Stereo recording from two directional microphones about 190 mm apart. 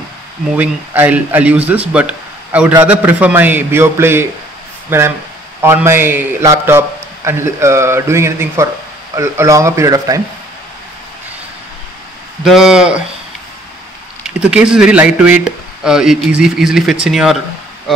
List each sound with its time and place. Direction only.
0.6 s a man's voice: 10° right (ahead or behind)
12.4 s speech: 5° right (ahead or behind)
14.2 s speech: 5° right (ahead or behind)